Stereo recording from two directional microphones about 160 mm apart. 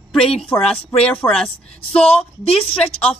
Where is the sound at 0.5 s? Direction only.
20° left (ahead or behind).